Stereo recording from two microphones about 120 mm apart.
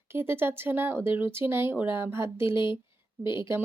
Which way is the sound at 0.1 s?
20° right (ahead or behind).